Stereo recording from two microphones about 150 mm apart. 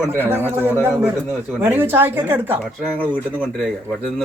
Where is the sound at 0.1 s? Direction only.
15° right (ahead or behind).